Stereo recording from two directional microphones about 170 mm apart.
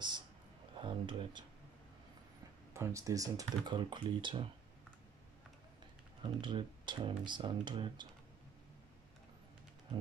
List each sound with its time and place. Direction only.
0.7 s a sound: 30° right (ahead or behind)
2.7 s speech: 15° right (ahead or behind)
6.2 s speech: 25° right (ahead or behind)